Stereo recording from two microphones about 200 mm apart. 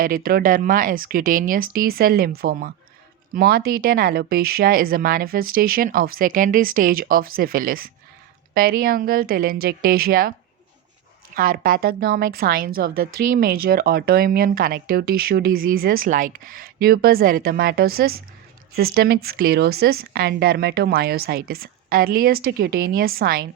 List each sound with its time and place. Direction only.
0.0 s a woman's voice: 45° right (ahead or behind)
11.3 s a woman's voice: 45° right (ahead or behind)